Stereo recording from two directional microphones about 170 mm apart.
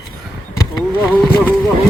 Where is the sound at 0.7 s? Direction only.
5° left (ahead or behind).